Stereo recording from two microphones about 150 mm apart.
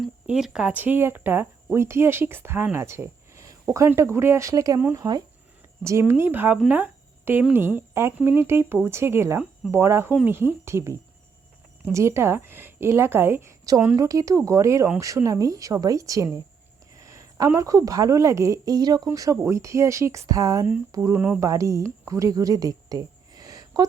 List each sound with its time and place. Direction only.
0.0 s a woman's voice: 5° right (ahead or behind); by 23.8 s 25° right (ahead or behind)